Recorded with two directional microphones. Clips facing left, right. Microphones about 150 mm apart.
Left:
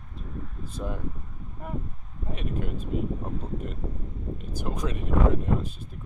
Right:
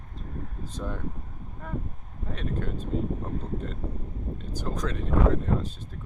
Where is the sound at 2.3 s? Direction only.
10° left (ahead or behind).